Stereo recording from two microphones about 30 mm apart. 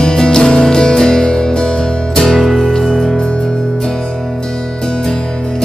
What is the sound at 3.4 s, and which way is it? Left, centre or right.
Music, centre.